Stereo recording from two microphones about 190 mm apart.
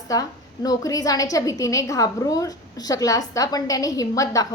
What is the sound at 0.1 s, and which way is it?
A woman's voice, 20° left (ahead or behind).